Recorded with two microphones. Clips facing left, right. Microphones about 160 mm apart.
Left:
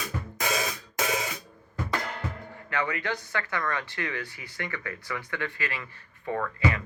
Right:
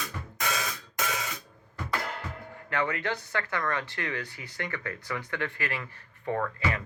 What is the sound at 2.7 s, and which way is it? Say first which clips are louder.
Speech: even; 35° right (ahead or behind).